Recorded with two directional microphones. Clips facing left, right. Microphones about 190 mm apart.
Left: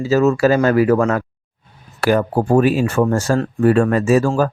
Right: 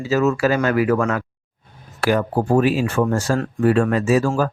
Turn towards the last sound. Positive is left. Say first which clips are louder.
# left 3 dB
turn(degrees=45)  # may be behind; listen again after turning